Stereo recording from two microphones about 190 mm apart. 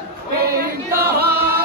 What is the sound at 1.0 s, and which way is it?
Singing, 55° right (ahead or behind).